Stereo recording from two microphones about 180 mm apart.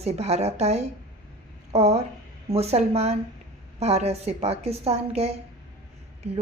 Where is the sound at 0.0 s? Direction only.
35° right (ahead or behind).